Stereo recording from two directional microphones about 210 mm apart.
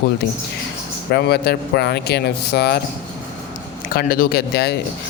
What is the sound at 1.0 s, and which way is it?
Speech, 50° left (ahead or behind).